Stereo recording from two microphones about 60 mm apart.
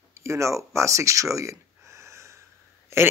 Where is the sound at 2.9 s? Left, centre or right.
Right.